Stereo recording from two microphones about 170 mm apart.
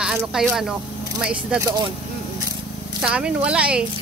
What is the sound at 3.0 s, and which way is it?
Speech, 5° right (ahead or behind).